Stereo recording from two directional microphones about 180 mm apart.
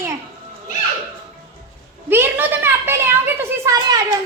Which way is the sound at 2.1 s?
10° right (ahead or behind).